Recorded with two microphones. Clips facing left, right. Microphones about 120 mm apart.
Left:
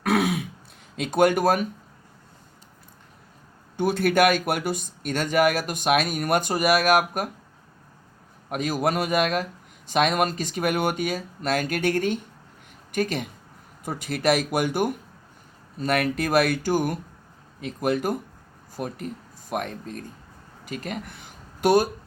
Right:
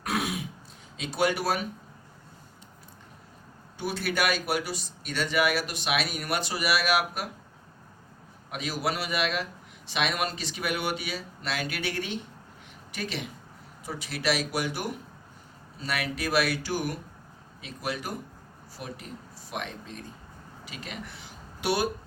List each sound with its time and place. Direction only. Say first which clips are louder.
0.0 s throat clearing: left 8 dB; 65° left (ahead or behind)
0.9 s a man's voice: left 7 dB; 50° left (ahead or behind)
3.8 s a man's voice: left 9 dB; 55° left (ahead or behind)
8.4 s a man's voice: left 6 dB; 50° left (ahead or behind)